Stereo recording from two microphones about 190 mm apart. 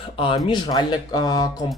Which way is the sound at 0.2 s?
25° left (ahead or behind).